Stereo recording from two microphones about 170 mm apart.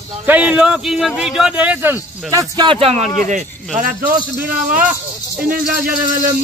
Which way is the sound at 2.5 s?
30° right (ahead or behind).